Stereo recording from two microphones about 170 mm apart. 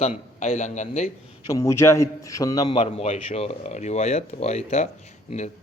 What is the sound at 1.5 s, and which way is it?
A man's voice, 15° left (ahead or behind).